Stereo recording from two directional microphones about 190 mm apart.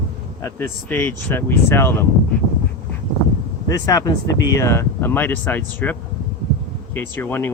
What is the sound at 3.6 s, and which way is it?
Speech, 20° left (ahead or behind).